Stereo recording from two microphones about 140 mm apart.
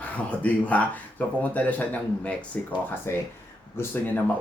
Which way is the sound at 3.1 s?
15° left (ahead or behind).